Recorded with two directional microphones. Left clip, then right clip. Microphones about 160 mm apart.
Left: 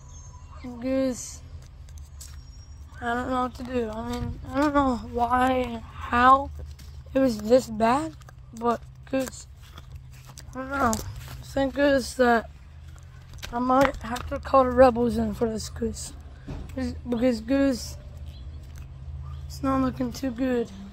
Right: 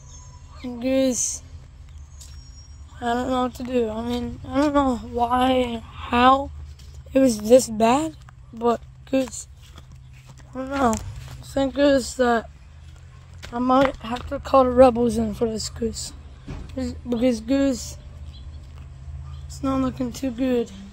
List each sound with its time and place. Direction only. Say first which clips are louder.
0.6 s speech: right 5 dB; 45° right (ahead or behind)
3.0 s speech: right 4 dB; 30° right (ahead or behind)
3.9 s speech: right 5 dB; 35° right (ahead or behind)
4.7 s speech: right 3 dB; 5° right (ahead or behind)
5.5 s speech: right 4 dB; 30° right (ahead or behind)
8.5 s speech: right 4 dB; 20° right (ahead or behind)
10.7 s speech: right 3 dB; 15° right (ahead or behind)
12.1 s speech: right 1 dB; centre (ahead or behind)
13.5 s speech: right 2 dB; 15° right (ahead or behind)
16.7 s speech: right 3 dB; 5° right (ahead or behind)
19.5 s speech: right 1 dB; 5° left (ahead or behind)
20.1 s speech: right 3 dB; 10° right (ahead or behind)